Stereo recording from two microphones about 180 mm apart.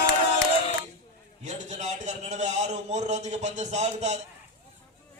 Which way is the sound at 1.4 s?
40° right (ahead or behind).